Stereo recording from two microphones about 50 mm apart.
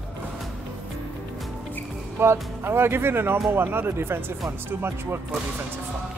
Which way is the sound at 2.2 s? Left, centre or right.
Right.